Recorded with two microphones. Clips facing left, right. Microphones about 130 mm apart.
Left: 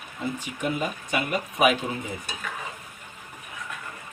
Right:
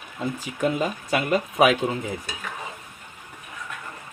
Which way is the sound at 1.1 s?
90° right.